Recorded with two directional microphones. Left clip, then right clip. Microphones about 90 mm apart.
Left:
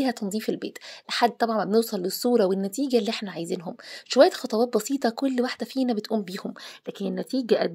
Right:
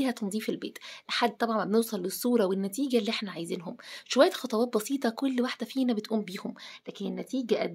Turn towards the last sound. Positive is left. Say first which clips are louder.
# left 6 dB
turn(degrees=75)  # may be behind; listen again after turning